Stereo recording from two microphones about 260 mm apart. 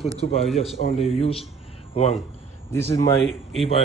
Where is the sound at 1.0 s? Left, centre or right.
Left.